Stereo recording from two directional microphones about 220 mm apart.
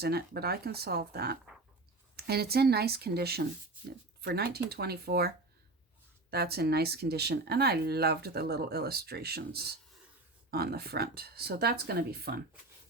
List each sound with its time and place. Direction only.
0.0 s speech: 45° right (ahead or behind)
6.3 s speech: 45° right (ahead or behind)